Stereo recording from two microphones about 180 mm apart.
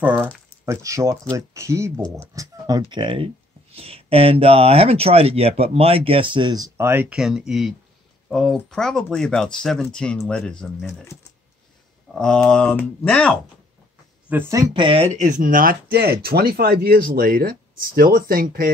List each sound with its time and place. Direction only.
0.7 s speech: 15° right (ahead or behind); by 10.9 s centre (ahead or behind)
12.2 s speech: 5° left (ahead or behind)
14.3 s speech: 20° right (ahead or behind); by 18.7 s 55° right (ahead or behind)